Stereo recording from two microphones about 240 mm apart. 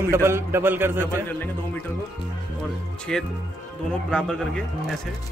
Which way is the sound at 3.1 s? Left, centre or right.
Centre.